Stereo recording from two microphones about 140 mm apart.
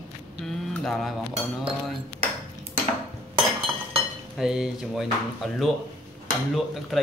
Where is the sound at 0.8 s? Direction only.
Centre (ahead or behind).